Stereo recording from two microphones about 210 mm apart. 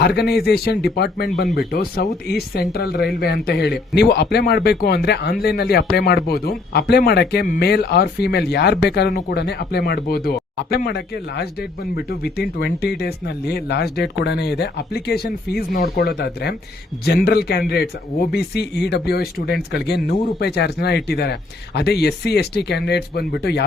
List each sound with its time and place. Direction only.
0.0 s speech: 50° left (ahead or behind)